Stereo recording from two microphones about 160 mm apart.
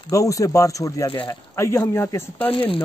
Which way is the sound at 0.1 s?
20° left (ahead or behind).